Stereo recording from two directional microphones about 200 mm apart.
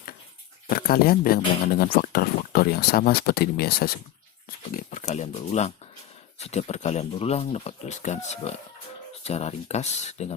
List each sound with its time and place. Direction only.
0.7 s speech: 50° left (ahead or behind)
4.8 s speech: 40° left (ahead or behind)